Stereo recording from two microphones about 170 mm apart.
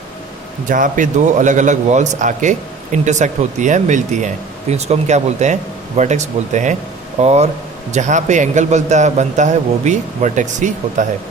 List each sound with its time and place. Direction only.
0.7 s a man's voice: 50° right (ahead or behind)